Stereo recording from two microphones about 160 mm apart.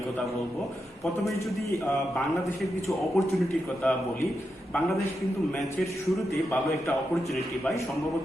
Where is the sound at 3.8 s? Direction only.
10° left (ahead or behind).